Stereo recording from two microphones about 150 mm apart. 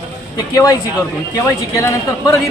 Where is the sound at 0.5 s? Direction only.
20° left (ahead or behind).